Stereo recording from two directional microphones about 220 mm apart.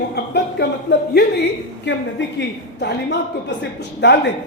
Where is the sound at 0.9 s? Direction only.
50° left (ahead or behind).